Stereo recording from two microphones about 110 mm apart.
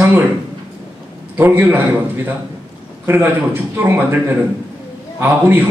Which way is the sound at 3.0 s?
20° right (ahead or behind).